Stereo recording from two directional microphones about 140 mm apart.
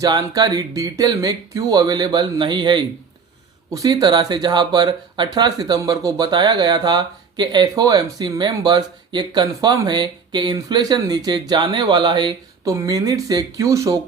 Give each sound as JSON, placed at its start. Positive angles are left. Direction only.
{"t": 0.0, "sound": "speech", "side_deg": -30}